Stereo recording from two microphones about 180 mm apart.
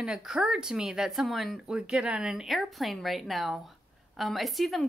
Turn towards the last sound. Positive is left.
turn(degrees=0)  # may be behind; listen again after turning